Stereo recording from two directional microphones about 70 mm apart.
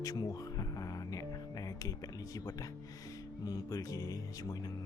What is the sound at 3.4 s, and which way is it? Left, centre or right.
Speech, left.